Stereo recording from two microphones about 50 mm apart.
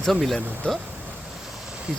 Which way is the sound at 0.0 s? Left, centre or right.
Centre.